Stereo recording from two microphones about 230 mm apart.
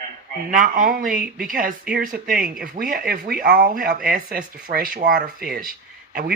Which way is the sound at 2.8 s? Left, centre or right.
Right.